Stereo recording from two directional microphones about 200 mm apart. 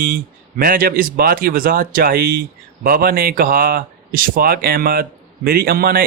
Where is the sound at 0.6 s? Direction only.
45° right (ahead or behind).